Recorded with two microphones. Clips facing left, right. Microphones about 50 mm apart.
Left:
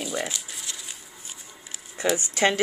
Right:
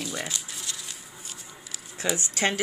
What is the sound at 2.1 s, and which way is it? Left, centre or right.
Speech, left.